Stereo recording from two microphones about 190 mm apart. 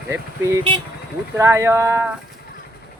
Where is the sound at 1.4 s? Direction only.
15° right (ahead or behind).